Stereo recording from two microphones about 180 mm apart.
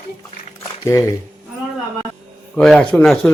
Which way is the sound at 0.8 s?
15° left (ahead or behind).